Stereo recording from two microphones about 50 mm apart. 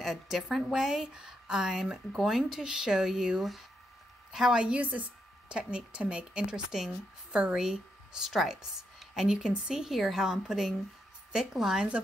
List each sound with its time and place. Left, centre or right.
0.0 s a woman's voice: centre
4.5 s a woman's voice: centre
4.7 s a woman's voice: right
5.5 s a woman's voice: centre